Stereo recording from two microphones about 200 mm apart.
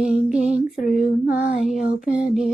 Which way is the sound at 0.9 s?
35° left (ahead or behind).